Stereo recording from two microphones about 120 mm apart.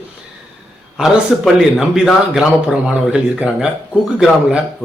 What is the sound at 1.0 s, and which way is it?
A man's voice, 5° right (ahead or behind).